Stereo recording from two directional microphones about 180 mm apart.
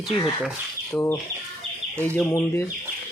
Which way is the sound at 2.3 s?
15° left (ahead or behind).